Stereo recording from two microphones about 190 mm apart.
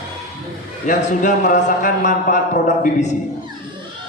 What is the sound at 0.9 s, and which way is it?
A man's voice, 45° left (ahead or behind).